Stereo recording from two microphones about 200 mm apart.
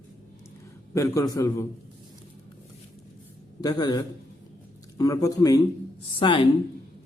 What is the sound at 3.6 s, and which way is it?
A man's voice, 20° left (ahead or behind).